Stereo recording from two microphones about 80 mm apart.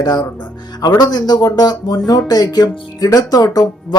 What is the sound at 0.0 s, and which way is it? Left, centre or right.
Speech, left.